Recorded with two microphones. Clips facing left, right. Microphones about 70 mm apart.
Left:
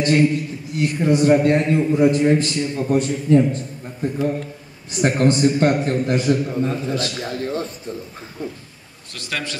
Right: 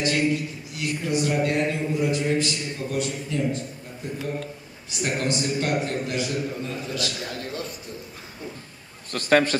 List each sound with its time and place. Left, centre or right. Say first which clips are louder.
0.0 s a man's voice: left 6 dB; left
9.1 s a man's voice: right 9 dB; right